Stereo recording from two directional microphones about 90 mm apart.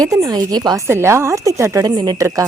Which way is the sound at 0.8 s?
30° right (ahead or behind).